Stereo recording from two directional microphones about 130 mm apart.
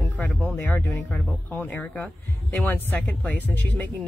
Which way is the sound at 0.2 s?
10° left (ahead or behind).